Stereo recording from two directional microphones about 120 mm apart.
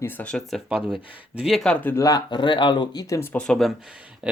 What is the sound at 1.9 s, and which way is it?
Speech, 30° left (ahead or behind).